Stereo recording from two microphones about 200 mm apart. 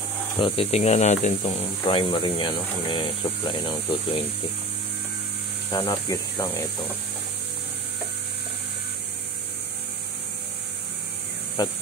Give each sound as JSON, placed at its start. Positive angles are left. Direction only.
{"t": 0.4, "sound": "speech", "side_deg": 30}
{"t": 5.7, "sound": "speech", "side_deg": 15}
{"t": 11.6, "sound": "speech", "side_deg": 20}